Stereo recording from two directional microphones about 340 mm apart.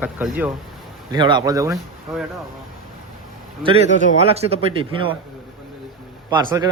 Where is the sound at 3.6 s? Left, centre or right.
Centre.